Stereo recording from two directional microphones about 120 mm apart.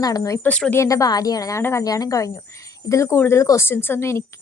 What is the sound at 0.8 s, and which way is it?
A woman's voice, 30° left (ahead or behind).